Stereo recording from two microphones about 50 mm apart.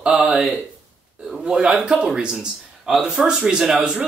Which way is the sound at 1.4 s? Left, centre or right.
Centre.